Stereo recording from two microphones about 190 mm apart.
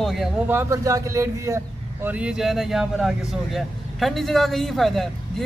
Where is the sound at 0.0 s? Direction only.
Centre (ahead or behind).